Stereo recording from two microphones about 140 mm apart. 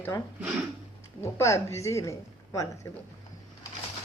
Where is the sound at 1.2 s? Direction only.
20° left (ahead or behind).